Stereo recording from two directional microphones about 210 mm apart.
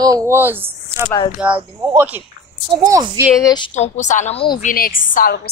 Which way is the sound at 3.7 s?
35° left (ahead or behind).